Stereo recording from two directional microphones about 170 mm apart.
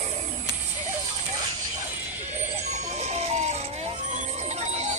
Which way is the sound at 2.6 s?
40° right (ahead or behind).